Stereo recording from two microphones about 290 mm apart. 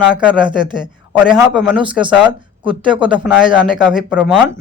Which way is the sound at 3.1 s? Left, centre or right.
Centre.